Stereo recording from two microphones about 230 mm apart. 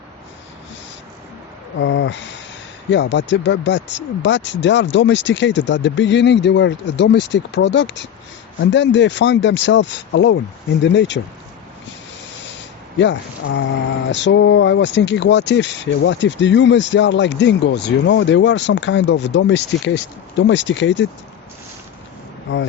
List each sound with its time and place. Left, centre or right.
1.8 s speech: left
13.0 s speech: left
22.5 s speech: left